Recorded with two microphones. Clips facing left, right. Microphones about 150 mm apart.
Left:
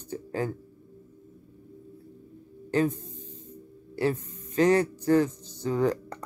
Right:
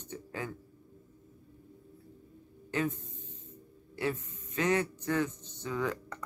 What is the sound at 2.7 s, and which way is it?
Speech, 35° left (ahead or behind).